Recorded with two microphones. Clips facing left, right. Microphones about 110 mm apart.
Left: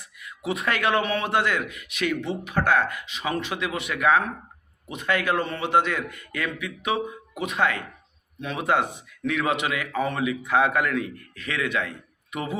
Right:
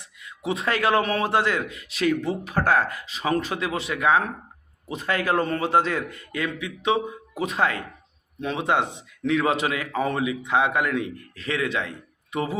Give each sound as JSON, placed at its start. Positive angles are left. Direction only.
{"t": 0.0, "sound": "a man's voice", "side_deg": -25}